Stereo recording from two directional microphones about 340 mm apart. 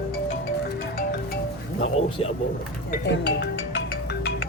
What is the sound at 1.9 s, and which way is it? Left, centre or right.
Speech, centre.